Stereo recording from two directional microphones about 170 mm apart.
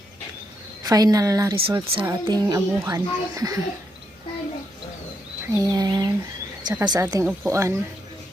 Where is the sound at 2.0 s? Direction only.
20° right (ahead or behind).